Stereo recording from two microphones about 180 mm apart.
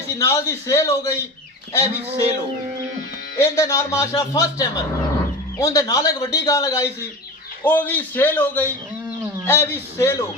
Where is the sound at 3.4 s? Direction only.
15° left (ahead or behind).